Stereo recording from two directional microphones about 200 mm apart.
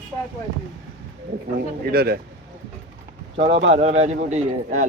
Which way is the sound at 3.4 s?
35° right (ahead or behind).